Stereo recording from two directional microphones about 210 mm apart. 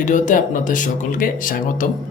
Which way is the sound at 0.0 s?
40° left (ahead or behind).